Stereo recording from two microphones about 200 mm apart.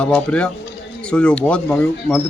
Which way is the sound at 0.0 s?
5° left (ahead or behind).